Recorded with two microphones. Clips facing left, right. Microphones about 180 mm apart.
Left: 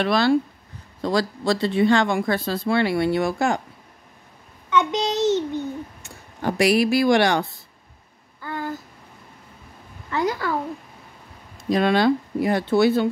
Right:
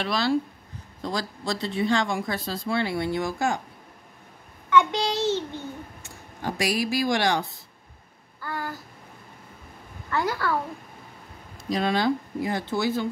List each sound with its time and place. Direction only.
0.0 s speech: 60° left (ahead or behind)
1.0 s speech: 70° left (ahead or behind)
4.6 s a child's voice: 20° left (ahead or behind)
6.0 s speech: 65° left (ahead or behind)
8.4 s a sound: 20° left (ahead or behind)
10.1 s a child's voice: 20° left (ahead or behind)
11.7 s speech: 65° left (ahead or behind)